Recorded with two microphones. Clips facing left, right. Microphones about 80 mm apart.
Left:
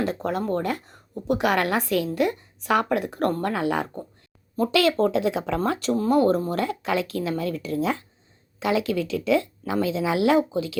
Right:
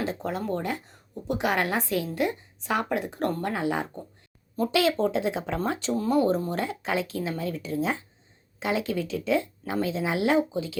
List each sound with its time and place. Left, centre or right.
0.0 s a woman's voice: left
5.6 s a woman's voice: left
8.5 s a woman's voice: left